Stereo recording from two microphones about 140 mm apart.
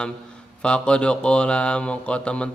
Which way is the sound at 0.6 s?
5° left (ahead or behind).